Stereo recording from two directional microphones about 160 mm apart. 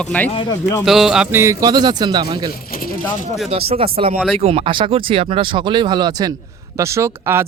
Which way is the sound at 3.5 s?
35° right (ahead or behind).